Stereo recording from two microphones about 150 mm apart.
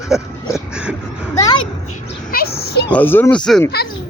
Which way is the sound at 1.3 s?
25° left (ahead or behind).